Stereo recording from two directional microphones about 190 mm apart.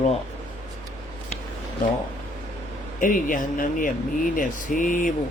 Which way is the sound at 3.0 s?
45° left (ahead or behind).